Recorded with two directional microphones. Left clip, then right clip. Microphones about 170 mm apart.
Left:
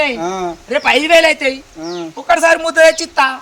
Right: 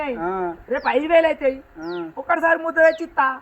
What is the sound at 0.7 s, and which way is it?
A man's voice, 20° left (ahead or behind).